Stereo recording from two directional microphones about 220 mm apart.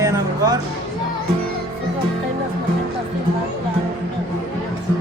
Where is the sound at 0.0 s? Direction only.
15° right (ahead or behind).